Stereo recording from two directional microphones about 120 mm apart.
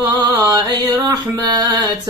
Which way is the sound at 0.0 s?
30° right (ahead or behind).